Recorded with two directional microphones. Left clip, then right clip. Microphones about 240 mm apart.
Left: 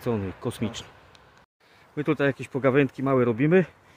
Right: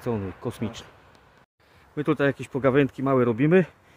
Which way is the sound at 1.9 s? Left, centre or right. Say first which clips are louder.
Right 1 dB; centre.